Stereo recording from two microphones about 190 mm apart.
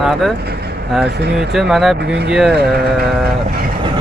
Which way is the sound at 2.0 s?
60° right (ahead or behind).